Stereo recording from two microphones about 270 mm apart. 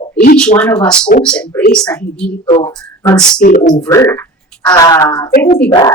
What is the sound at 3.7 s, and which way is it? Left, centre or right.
Speech, centre.